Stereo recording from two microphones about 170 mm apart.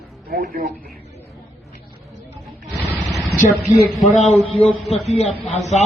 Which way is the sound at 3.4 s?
20° left (ahead or behind).